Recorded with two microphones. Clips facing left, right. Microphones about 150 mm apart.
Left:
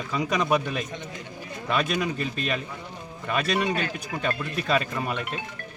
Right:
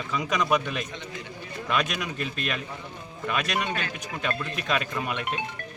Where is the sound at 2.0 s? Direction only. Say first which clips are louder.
Left 3 dB; 35° left (ahead or behind).